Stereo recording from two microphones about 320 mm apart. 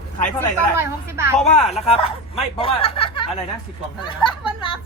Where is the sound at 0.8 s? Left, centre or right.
Centre.